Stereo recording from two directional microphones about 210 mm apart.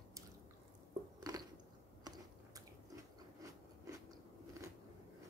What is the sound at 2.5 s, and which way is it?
Biting, 15° right (ahead or behind).